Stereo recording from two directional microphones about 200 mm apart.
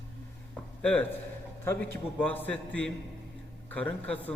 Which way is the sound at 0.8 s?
5° left (ahead or behind).